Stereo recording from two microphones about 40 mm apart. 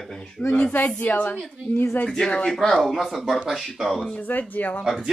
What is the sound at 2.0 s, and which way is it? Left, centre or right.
Speech, centre.